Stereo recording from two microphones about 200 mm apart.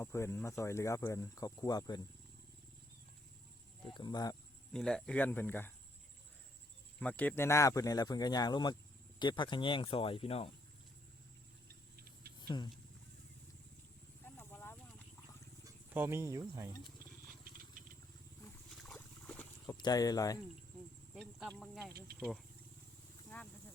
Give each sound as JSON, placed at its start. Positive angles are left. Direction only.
{"t": 0.0, "sound": "speech", "side_deg": 15}
{"t": 3.9, "sound": "speech", "side_deg": 20}
{"t": 4.7, "sound": "speech", "side_deg": 0}
{"t": 7.0, "sound": "speech", "side_deg": 5}
{"t": 12.4, "sound": "a sound", "side_deg": 20}
{"t": 14.3, "sound": "horse", "side_deg": 10}
{"t": 15.6, "sound": "speech", "side_deg": -10}
{"t": 18.8, "sound": "boat", "side_deg": 5}
{"t": 19.6, "sound": "speech", "side_deg": 20}
{"t": 21.2, "sound": "speech", "side_deg": 0}
{"t": 21.9, "sound": "speech", "side_deg": -50}
{"t": 23.3, "sound": "speech", "side_deg": 10}